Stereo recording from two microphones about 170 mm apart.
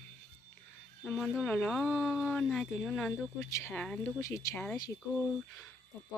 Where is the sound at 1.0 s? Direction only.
Centre (ahead or behind).